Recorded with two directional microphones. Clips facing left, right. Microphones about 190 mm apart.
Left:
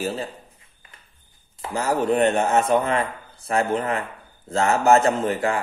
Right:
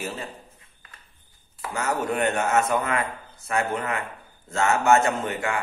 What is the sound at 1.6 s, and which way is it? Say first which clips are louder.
Speech: left 4 dB; 30° left (ahead or behind).